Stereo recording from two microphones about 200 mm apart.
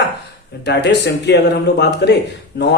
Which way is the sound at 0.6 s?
55° left (ahead or behind).